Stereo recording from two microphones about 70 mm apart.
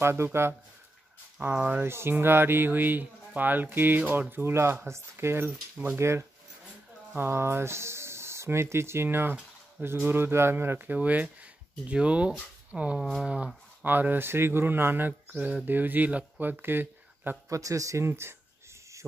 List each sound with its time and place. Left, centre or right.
0.0 s speech: right
1.4 s speech: right
1.8 s speech: right
5.9 s speech: right; by 13.5 s centre
13.8 s speech: right
17.5 s speech: right